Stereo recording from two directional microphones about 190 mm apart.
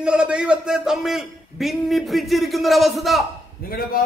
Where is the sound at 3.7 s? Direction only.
50° left (ahead or behind).